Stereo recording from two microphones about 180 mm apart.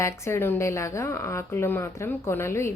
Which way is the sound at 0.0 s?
15° left (ahead or behind).